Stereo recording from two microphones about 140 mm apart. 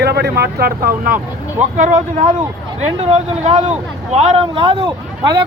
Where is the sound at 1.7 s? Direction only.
65° right (ahead or behind).